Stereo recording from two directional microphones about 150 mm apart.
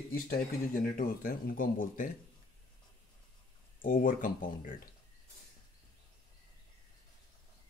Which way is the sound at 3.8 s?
65° left (ahead or behind).